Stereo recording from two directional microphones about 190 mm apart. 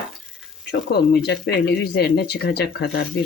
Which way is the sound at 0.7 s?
60° left (ahead or behind).